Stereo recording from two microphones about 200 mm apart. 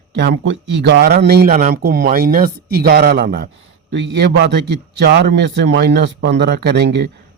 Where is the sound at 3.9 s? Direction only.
60° right (ahead or behind).